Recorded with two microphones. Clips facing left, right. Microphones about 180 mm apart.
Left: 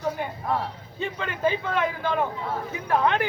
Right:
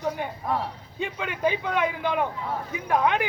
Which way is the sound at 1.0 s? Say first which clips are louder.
Even; 15° right (ahead or behind).